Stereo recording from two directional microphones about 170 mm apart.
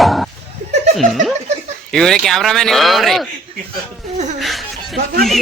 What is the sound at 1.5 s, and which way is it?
Snicker, 40° right (ahead or behind).